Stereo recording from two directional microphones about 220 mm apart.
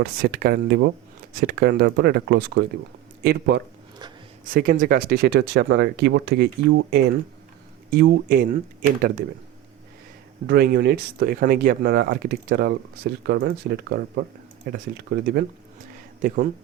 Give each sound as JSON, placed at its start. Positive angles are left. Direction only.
{"t": 0.0, "sound": "speech", "side_deg": -45}
{"t": 10.4, "sound": "speech", "side_deg": -45}